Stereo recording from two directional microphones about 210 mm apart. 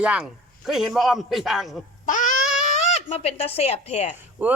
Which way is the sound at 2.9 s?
30° left (ahead or behind).